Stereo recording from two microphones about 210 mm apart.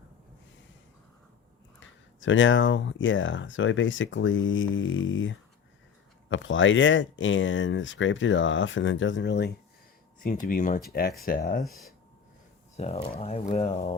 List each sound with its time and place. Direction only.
2.2 s speech: 65° left (ahead or behind)
10.2 s speech: 40° left (ahead or behind)
11.6 s speech: centre (ahead or behind)
12.7 s speech: 30° left (ahead or behind)